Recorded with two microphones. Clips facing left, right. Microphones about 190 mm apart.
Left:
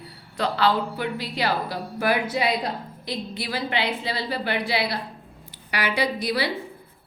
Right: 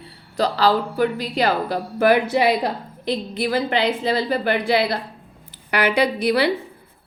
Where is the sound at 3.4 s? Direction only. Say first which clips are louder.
Right 7 dB; 50° right (ahead or behind).